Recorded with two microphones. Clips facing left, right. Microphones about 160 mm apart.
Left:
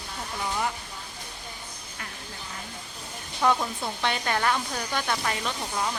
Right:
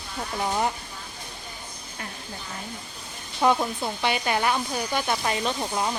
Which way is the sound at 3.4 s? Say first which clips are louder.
Right 3 dB; 20° right (ahead or behind).